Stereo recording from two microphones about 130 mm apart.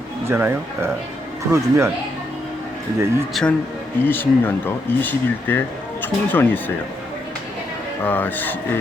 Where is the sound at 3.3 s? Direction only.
5° left (ahead or behind).